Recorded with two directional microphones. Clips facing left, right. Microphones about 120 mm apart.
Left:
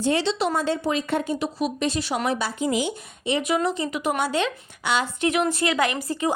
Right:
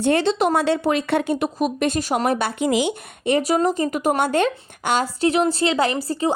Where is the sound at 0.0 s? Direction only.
55° right (ahead or behind).